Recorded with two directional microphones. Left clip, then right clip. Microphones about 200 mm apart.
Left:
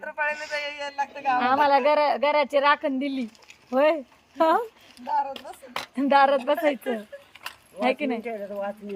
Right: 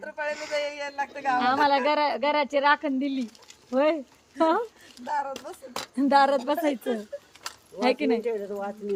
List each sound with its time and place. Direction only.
0.0 s a sound: 25° right (ahead or behind)
0.3 s a man's voice: 55° right (ahead or behind); by 1.4 s 35° right (ahead or behind)
1.4 s speech: 55° left (ahead or behind)
5.0 s speech: 35° right (ahead or behind)
6.0 s speech: 25° left (ahead or behind)
7.8 s speech: 5° right (ahead or behind)
8.2 s a man's voice: 50° right (ahead or behind)